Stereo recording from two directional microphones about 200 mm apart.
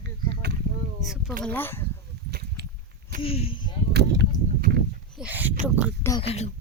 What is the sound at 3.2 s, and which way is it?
Speech, 30° left (ahead or behind).